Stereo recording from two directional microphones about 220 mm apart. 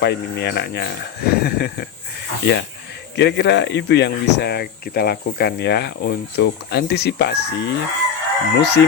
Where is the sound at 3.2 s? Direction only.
50° left (ahead or behind).